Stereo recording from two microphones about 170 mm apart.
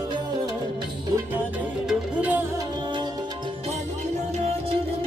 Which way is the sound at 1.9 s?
10° right (ahead or behind).